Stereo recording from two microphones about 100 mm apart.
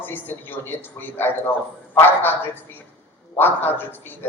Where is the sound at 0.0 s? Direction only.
20° left (ahead or behind).